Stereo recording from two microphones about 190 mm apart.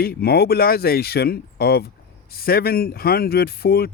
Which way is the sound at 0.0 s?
55° left (ahead or behind).